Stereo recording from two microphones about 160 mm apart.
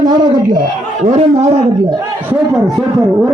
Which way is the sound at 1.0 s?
45° right (ahead or behind).